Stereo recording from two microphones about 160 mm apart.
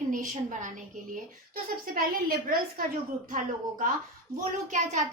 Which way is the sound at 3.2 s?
55° right (ahead or behind).